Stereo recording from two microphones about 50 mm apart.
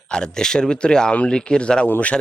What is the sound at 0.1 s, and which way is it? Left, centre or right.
A man's voice, centre.